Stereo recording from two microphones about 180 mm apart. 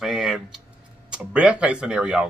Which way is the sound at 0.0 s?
Centre (ahead or behind).